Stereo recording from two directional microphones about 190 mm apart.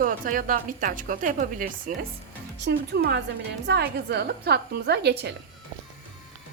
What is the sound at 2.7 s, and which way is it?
A woman's voice, 60° right (ahead or behind).